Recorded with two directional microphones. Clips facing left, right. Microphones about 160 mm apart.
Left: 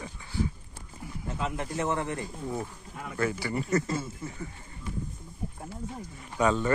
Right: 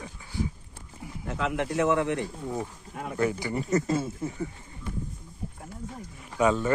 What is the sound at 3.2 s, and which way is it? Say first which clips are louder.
Speech: right 2 dB; 15° right (ahead or behind).